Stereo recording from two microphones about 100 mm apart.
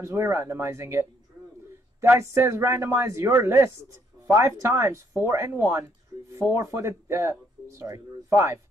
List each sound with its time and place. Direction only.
0.0 s speech: 30° right (ahead or behind)